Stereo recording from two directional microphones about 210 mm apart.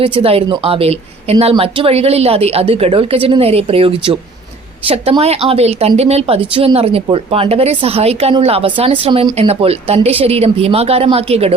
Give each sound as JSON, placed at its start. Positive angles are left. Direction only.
{"t": 0.0, "sound": "a woman's voice", "side_deg": -25}